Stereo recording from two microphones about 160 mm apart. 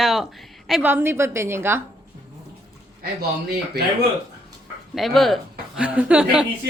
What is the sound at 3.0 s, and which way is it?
Speech, 75° right (ahead or behind).